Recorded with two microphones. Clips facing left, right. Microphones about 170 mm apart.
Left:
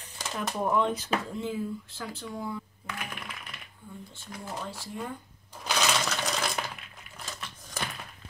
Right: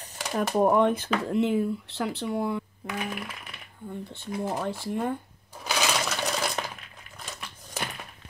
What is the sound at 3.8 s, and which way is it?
Speech, 65° right (ahead or behind).